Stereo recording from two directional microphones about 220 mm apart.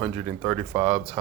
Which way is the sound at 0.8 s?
30° right (ahead or behind).